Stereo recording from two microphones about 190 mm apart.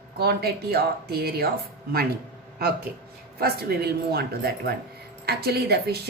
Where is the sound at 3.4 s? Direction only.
55° right (ahead or behind).